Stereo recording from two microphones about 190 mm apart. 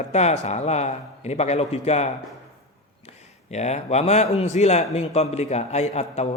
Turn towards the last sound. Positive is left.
turn(degrees=35)  # may be behind; listen again after turning